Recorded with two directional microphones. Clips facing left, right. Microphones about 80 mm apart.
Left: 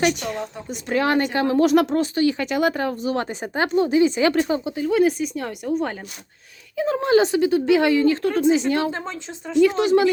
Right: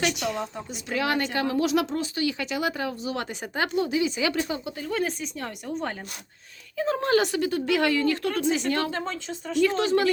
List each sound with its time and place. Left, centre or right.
0.1 s a woman's voice: left
1.6 s speech: left
4.6 s speech: centre
7.2 s a woman's voice: left